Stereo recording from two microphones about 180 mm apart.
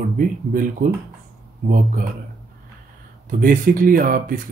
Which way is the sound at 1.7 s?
50° right (ahead or behind).